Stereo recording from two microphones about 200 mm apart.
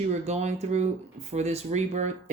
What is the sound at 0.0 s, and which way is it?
Speech, 35° right (ahead or behind).